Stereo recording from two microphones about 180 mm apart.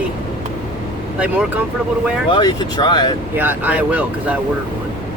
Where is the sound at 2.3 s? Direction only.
25° left (ahead or behind).